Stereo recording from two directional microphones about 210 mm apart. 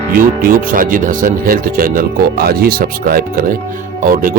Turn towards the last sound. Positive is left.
turn(degrees=-40)  # may be behind; listen again after turning